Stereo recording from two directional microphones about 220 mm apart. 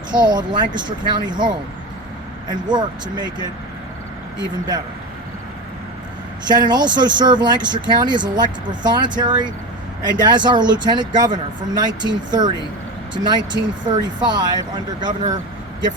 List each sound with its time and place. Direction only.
0.1 s speech: 20° right (ahead or behind)
6.5 s speech: 20° right (ahead or behind)